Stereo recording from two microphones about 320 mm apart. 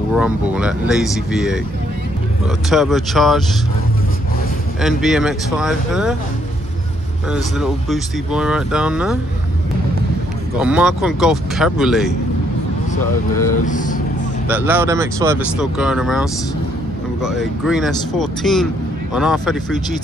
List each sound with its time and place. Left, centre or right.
0.1 s speech: centre
2.7 s speech: centre
4.8 s speech: centre
7.2 s speech: centre
10.6 s speech: centre
13.7 s speech: left
14.5 s speech: centre